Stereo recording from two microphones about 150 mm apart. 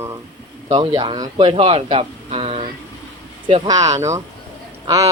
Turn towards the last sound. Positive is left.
turn(degrees=-20)  # may be behind; listen again after turning